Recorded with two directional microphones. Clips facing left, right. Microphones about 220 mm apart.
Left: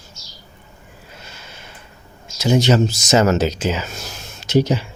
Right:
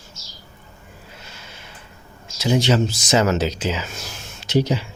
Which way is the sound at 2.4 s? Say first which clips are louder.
Left 3 dB; 45° left (ahead or behind).